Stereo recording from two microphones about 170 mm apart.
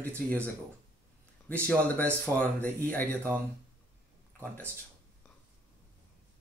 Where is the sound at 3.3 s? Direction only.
15° right (ahead or behind).